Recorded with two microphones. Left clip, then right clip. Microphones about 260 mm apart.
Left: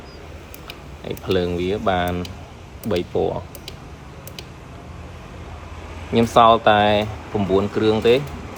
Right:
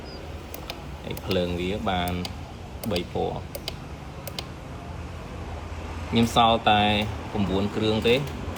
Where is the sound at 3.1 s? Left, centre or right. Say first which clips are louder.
Left 7 dB; left.